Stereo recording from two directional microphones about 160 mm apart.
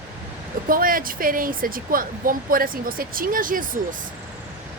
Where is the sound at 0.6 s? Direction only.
60° right (ahead or behind).